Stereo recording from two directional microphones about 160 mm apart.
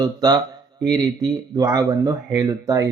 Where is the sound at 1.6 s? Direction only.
25° right (ahead or behind).